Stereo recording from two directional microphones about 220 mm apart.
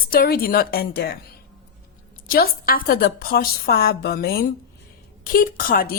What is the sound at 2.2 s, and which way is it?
A woman's voice, 40° left (ahead or behind).